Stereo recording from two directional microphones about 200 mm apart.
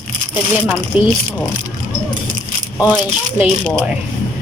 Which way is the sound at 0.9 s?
10° right (ahead or behind).